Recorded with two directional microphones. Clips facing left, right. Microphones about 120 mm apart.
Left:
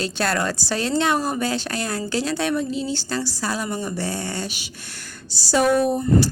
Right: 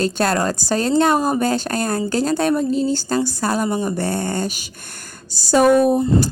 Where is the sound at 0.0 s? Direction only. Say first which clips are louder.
Right 5 dB; 45° right (ahead or behind).